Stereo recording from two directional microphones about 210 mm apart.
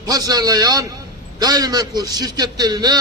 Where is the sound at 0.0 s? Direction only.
15° right (ahead or behind).